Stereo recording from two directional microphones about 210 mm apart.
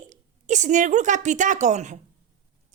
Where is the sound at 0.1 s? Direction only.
35° right (ahead or behind).